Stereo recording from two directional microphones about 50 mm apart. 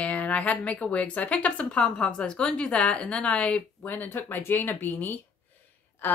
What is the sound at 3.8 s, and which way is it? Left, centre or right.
A woman's voice, left.